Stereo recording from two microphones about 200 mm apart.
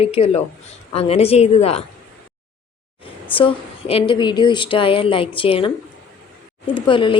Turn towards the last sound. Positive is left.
turn(degrees=25)  # may be behind; listen again after turning